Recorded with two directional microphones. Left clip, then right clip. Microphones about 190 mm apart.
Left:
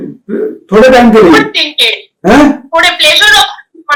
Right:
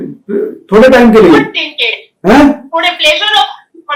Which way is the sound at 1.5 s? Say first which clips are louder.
Left 4 dB; 50° left (ahead or behind).